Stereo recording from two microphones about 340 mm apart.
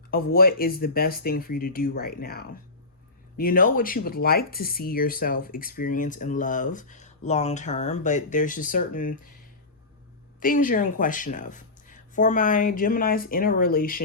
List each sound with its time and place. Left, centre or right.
0.1 s speech: left
10.4 s speech: left